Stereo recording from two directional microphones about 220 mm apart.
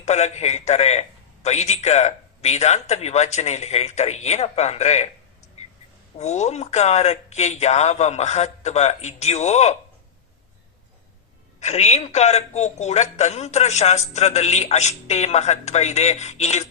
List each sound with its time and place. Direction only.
0.0 s a man's voice: 30° left (ahead or behind)
6.1 s a man's voice: 30° left (ahead or behind)
11.6 s a man's voice: 30° left (ahead or behind)